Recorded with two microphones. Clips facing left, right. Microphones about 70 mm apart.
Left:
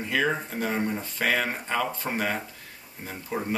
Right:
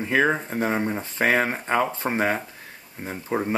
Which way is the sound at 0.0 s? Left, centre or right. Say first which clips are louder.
Right 5 dB; right.